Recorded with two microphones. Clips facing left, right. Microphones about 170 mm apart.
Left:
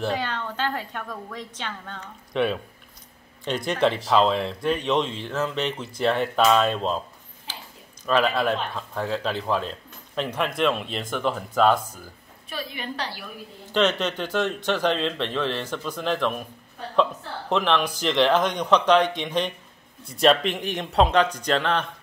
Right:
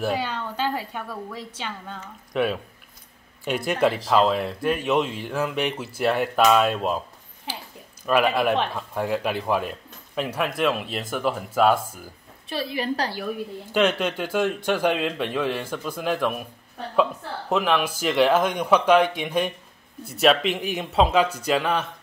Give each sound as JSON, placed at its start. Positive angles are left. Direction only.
{"t": 0.0, "sound": "speech", "side_deg": -10}
{"t": 8.1, "sound": "speech", "side_deg": -10}
{"t": 12.4, "sound": "a woman's voice", "side_deg": -30}
{"t": 13.7, "sound": "speech", "side_deg": -10}